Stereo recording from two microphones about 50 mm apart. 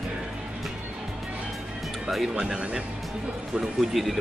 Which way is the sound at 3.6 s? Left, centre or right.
Centre.